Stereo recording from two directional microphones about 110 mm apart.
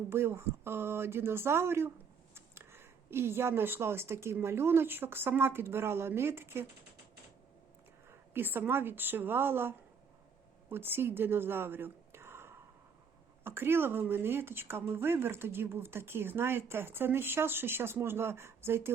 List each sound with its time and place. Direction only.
0.1 s a woman's voice: 25° right (ahead or behind)
8.3 s a woman's voice: 20° right (ahead or behind)